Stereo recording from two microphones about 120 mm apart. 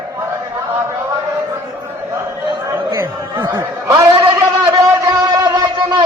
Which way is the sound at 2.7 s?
20° right (ahead or behind).